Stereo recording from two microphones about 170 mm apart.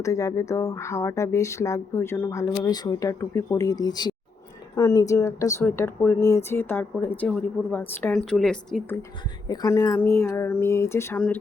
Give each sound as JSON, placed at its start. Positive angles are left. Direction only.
{"t": 0.0, "sound": "speech", "side_deg": 20}
{"t": 9.5, "sound": "speech", "side_deg": 20}